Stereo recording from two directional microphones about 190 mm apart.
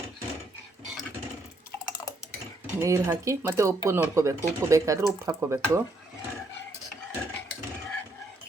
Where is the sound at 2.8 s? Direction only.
15° right (ahead or behind).